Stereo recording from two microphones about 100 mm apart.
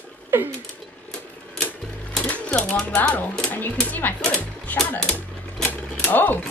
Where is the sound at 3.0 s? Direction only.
15° left (ahead or behind).